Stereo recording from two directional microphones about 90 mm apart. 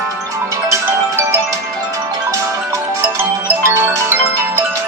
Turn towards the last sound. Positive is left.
turn(degrees=-25)  # may be behind; listen again after turning